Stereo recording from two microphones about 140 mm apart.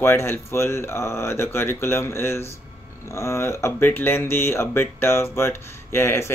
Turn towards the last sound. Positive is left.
turn(degrees=20)  # may be behind; listen again after turning